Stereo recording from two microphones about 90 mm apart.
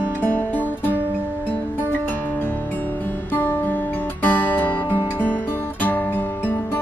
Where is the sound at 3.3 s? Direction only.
25° left (ahead or behind).